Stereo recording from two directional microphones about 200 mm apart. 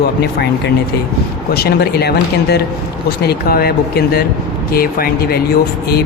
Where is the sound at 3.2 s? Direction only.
50° left (ahead or behind).